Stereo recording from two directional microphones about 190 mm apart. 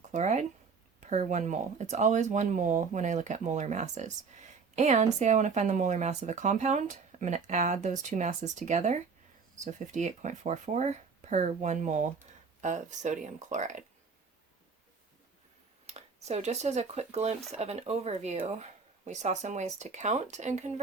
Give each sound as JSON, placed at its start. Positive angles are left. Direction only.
{"t": 0.1, "sound": "speech", "side_deg": -35}
{"t": 15.9, "sound": "speech", "side_deg": -35}